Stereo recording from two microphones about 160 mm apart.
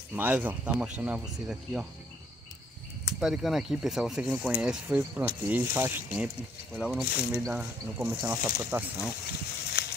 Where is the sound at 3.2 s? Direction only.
Centre (ahead or behind).